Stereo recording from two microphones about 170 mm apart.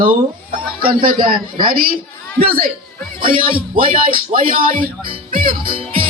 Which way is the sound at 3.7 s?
55° right (ahead or behind).